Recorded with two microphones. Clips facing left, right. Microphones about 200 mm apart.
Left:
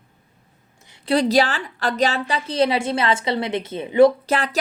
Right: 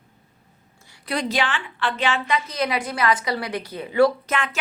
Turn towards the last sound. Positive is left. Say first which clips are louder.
# left 4 dB
turn(degrees=35)  # may be behind; listen again after turning